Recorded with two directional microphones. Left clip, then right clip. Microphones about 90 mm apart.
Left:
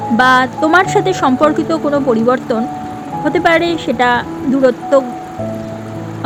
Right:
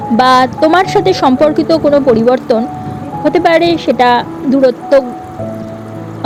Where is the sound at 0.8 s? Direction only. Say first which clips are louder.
Right 3 dB; 35° right (ahead or behind).